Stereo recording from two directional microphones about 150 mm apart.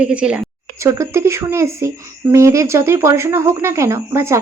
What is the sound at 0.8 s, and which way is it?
Speech, 20° right (ahead or behind).